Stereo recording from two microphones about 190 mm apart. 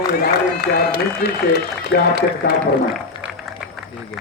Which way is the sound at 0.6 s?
55° left (ahead or behind).